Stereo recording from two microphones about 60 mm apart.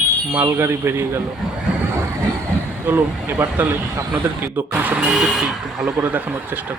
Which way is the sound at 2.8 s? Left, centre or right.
Right.